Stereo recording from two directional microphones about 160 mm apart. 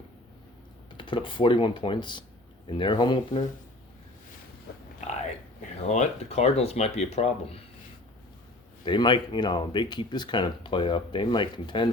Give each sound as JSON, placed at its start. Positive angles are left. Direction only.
{"t": 0.9, "sound": "speech", "side_deg": 30}
{"t": 5.9, "sound": "speech", "side_deg": 45}
{"t": 8.8, "sound": "speech", "side_deg": 30}